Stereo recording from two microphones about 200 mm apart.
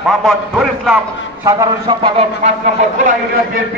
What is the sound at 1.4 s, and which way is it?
A man's voice, 20° right (ahead or behind).